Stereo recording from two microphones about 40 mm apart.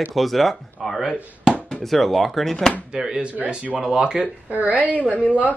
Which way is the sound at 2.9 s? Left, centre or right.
Centre.